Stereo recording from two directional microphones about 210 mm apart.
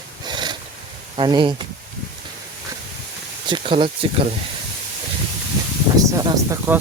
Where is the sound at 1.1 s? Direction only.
20° right (ahead or behind).